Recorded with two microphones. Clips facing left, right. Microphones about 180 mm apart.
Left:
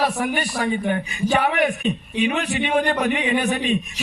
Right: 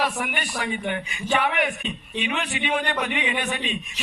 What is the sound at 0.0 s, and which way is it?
A man's voice, 40° left (ahead or behind).